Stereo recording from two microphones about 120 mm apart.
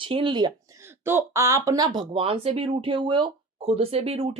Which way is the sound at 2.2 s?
55° right (ahead or behind).